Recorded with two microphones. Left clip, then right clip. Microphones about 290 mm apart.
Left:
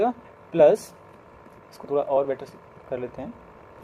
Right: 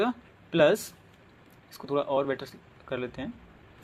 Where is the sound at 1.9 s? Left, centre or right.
Right.